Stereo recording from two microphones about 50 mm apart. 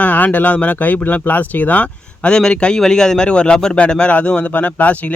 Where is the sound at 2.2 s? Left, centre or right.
Centre.